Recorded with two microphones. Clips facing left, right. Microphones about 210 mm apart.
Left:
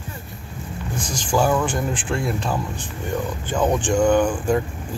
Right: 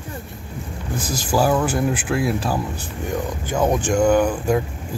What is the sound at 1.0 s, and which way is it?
Speech, 5° right (ahead or behind).